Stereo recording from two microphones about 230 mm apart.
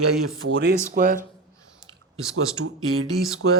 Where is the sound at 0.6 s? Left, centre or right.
Right.